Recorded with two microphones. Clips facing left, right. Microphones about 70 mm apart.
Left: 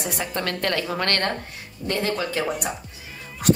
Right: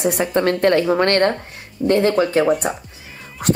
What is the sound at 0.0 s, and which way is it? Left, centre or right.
A woman's voice, right.